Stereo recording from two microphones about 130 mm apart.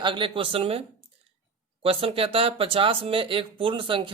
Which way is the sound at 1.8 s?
45° right (ahead or behind).